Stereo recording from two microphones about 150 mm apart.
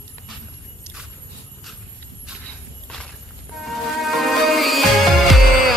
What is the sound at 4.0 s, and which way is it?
Music, centre (ahead or behind).